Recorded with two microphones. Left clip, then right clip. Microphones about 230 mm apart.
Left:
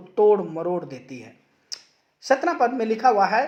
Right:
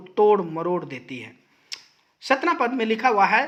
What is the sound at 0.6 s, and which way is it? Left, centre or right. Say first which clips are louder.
Speech: right 1 dB; right.